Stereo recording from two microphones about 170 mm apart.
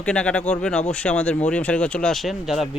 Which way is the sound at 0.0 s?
5° left (ahead or behind).